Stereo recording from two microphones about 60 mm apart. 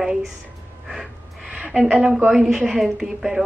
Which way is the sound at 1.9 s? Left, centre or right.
Centre.